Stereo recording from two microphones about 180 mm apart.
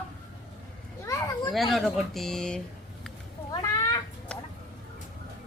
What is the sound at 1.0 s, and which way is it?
Children playing, 15° left (ahead or behind).